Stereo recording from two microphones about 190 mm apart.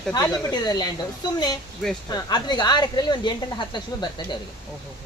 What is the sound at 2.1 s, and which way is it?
Speech, 20° left (ahead or behind).